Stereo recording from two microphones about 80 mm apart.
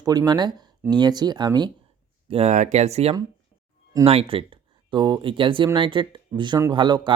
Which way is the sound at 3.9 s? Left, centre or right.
Right.